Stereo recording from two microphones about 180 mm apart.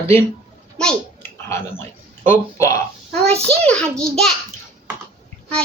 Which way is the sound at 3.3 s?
35° right (ahead or behind).